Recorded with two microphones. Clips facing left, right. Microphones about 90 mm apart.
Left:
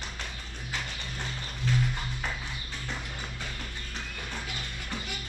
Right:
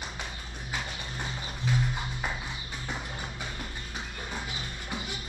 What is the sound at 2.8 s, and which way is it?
Music, 15° right (ahead or behind).